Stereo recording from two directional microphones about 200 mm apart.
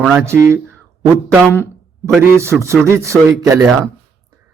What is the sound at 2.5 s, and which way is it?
Speech, centre (ahead or behind).